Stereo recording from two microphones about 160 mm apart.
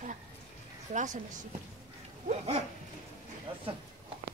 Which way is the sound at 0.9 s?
50° right (ahead or behind).